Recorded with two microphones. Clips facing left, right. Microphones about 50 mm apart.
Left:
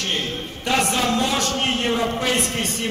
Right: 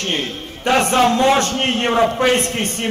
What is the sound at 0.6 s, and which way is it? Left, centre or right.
A man's voice, right.